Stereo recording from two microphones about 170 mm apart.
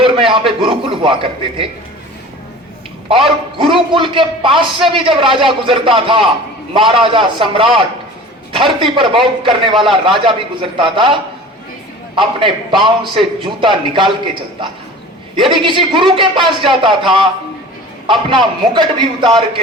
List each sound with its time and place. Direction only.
0.0 s a man's voice: 30° right (ahead or behind)
3.1 s a man's voice: 30° right (ahead or behind)
15.4 s a man's voice: 30° right (ahead or behind)